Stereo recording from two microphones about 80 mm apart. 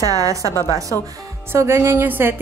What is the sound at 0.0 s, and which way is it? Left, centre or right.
Speech, right.